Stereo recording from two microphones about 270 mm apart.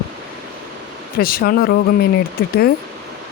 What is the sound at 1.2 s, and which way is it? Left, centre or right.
Speech, left.